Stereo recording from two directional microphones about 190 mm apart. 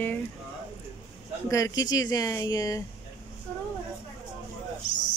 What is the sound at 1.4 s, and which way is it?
Speech, 15° left (ahead or behind).